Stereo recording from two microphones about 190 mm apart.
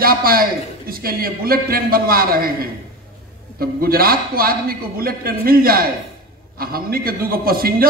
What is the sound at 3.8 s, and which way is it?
A man's voice, 50° right (ahead or behind).